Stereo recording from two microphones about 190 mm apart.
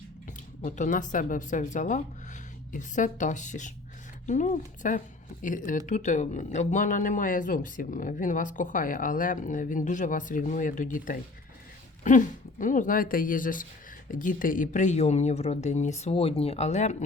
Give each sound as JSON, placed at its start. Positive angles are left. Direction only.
{"t": 0.6, "sound": "speech", "side_deg": 40}